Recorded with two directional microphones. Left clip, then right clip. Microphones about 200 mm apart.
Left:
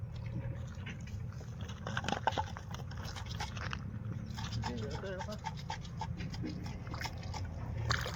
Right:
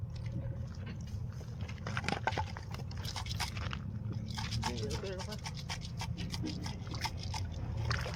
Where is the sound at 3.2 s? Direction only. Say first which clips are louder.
Right 4 dB; 15° right (ahead or behind).